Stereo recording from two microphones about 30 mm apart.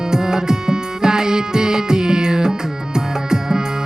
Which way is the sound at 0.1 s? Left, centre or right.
Right.